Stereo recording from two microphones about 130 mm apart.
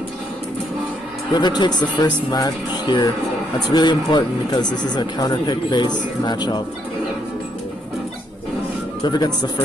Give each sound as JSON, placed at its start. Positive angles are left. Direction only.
{"t": 1.3, "sound": "speech", "side_deg": 35}
{"t": 9.0, "sound": "speech", "side_deg": 35}